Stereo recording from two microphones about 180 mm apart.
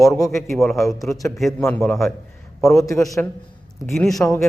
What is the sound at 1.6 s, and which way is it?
A man's voice, 15° left (ahead or behind).